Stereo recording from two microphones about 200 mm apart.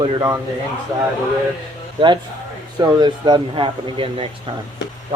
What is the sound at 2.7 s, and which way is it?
Speech, 20° right (ahead or behind).